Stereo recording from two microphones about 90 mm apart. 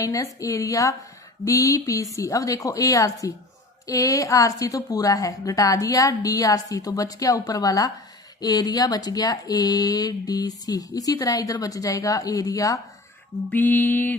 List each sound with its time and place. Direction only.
0.0 s a woman's voice: 40° left (ahead or behind)
13.5 s mantra: 20° left (ahead or behind)